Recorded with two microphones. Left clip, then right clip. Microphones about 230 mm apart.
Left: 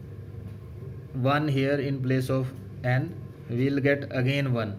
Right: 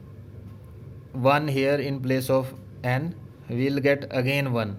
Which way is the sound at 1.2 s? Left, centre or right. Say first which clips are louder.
Right 4 dB; right.